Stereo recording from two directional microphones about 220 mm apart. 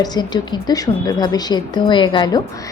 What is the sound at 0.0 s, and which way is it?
A woman's voice, 20° left (ahead or behind).